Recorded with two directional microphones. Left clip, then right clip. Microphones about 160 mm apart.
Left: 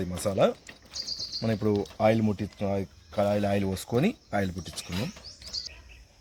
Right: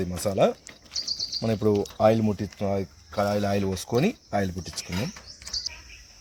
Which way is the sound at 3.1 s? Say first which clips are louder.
Right 1 dB; 15° right (ahead or behind).